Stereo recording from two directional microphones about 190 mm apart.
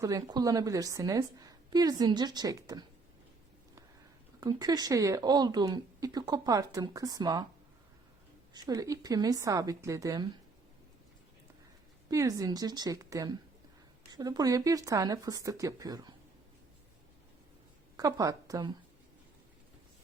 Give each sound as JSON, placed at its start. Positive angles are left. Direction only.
{"t": 0.0, "sound": "speech", "side_deg": -20}
{"t": 4.4, "sound": "speech", "side_deg": -20}
{"t": 8.5, "sound": "speech", "side_deg": -20}
{"t": 12.1, "sound": "a woman's voice", "side_deg": -15}
{"t": 17.9, "sound": "a woman's voice", "side_deg": -20}